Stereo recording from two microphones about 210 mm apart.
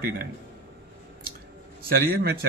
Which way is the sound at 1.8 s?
45° right (ahead or behind).